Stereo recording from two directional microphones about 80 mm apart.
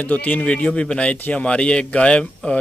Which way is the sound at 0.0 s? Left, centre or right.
Centre.